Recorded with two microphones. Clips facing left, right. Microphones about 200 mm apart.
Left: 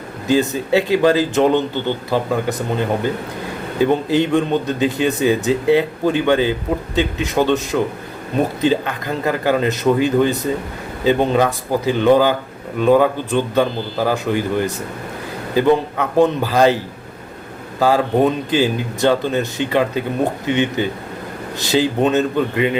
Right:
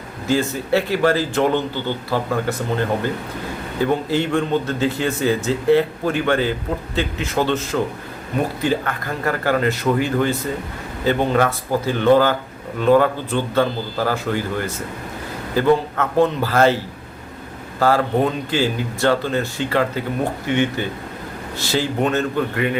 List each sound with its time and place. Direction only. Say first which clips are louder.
0.3 s speech: left 3 dB; 15° left (ahead or behind)
17.7 s speech: left 2 dB; 15° left (ahead or behind)